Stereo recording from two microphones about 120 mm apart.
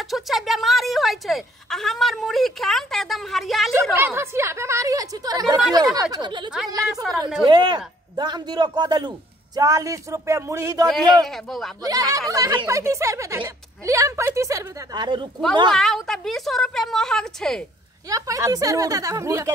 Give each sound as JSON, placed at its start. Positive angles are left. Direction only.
{"t": 0.1, "sound": "a woman's voice", "side_deg": 0}
{"t": 3.9, "sound": "a woman's voice", "side_deg": -20}
{"t": 7.4, "sound": "a man's voice", "side_deg": -40}
{"t": 15.0, "sound": "a man's voice", "side_deg": -40}
{"t": 15.7, "sound": "a woman's voice", "side_deg": 0}
{"t": 18.1, "sound": "a woman's voice", "side_deg": -30}